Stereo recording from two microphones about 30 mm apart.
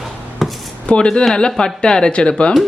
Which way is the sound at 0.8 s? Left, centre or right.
Left.